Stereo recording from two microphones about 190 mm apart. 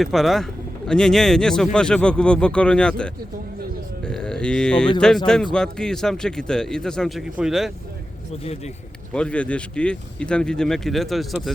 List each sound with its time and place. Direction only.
0.0 s a man's voice: centre (ahead or behind)
9.1 s a man's voice: 5° left (ahead or behind)